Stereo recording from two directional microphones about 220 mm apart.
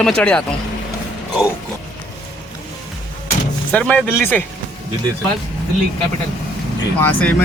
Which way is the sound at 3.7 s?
5° left (ahead or behind).